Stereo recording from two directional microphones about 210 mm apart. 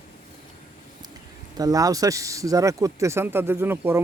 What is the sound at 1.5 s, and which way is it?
Speech, 15° right (ahead or behind).